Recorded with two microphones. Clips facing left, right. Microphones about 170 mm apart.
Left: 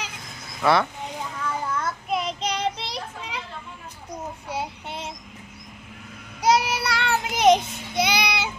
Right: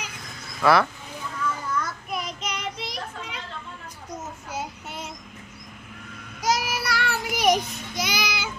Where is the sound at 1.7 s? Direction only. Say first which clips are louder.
Left 3 dB; 25° left (ahead or behind).